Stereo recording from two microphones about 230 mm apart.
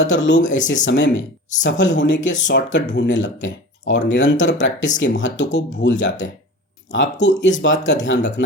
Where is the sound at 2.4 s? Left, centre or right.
Left.